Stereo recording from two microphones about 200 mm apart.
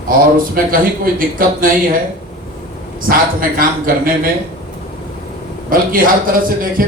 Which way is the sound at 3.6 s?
45° right (ahead or behind).